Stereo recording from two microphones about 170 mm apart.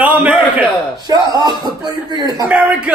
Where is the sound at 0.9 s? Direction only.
20° right (ahead or behind).